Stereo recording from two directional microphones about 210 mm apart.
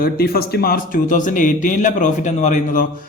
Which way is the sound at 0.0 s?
45° left (ahead or behind).